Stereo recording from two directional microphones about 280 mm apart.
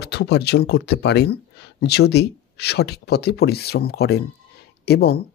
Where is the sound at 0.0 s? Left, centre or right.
Left.